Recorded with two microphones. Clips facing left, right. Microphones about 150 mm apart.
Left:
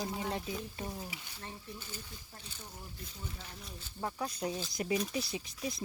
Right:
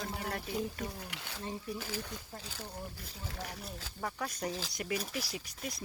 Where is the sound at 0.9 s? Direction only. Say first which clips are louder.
Right 1 dB; 75° right (ahead or behind).